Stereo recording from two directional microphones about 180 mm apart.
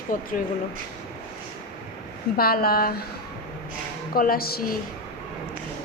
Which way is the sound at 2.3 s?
55° left (ahead or behind).